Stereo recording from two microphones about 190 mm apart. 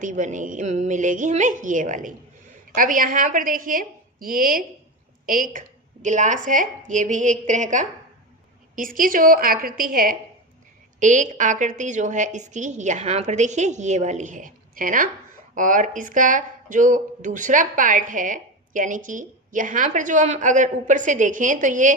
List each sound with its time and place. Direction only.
0.0 s a woman's voice: 40° right (ahead or behind)